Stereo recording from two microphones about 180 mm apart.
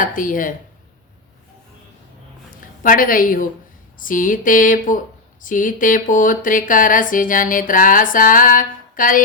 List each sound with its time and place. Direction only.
0.0 s speech: 50° left (ahead or behind)
2.8 s speech: 50° left (ahead or behind)